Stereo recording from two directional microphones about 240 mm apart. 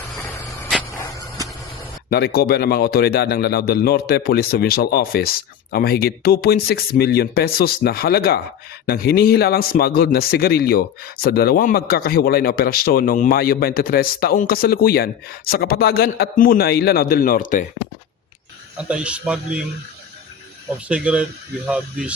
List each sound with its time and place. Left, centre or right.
0.2 s a sound: centre
2.0 s speech: left
18.8 s a man's voice: centre
20.8 s a man's voice: centre